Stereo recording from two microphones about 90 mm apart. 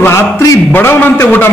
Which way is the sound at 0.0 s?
30° left (ahead or behind).